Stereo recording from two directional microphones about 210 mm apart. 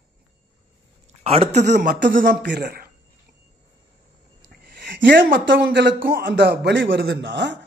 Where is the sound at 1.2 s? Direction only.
30° right (ahead or behind).